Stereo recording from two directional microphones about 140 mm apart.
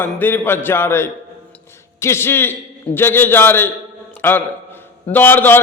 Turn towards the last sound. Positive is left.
turn(degrees=15)  # may be behind; listen again after turning